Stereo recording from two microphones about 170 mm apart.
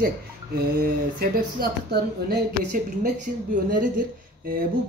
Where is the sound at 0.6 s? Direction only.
65° right (ahead or behind).